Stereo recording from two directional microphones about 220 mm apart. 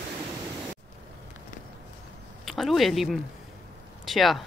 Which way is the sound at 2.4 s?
Centre (ahead or behind).